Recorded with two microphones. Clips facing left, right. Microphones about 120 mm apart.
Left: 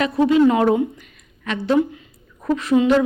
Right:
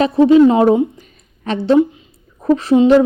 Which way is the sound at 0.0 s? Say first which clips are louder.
Right 6 dB; 30° right (ahead or behind).